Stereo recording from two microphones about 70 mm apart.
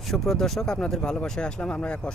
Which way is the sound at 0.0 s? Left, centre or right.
Centre.